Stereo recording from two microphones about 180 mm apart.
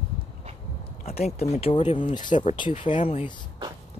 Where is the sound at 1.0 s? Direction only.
35° left (ahead or behind).